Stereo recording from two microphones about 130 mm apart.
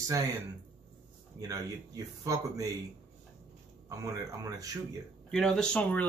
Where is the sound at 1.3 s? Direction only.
30° right (ahead or behind).